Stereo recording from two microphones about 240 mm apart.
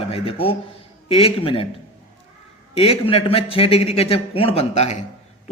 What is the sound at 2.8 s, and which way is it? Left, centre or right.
Speech, left.